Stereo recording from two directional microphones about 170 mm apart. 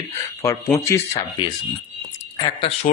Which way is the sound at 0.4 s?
20° left (ahead or behind).